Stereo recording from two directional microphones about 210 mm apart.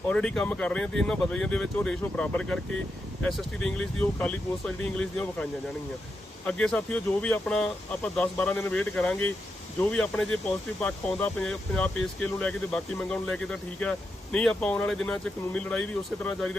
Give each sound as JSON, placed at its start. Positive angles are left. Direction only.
{"t": 0.1, "sound": "speech", "side_deg": 5}